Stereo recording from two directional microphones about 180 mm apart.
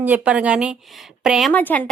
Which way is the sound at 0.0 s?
10° right (ahead or behind).